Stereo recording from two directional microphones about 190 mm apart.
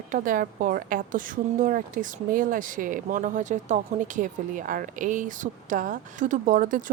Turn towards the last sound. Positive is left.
turn(degrees=-45)  # may be behind; listen again after turning